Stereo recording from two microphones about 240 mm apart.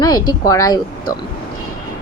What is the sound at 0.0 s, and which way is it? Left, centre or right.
Speech, centre.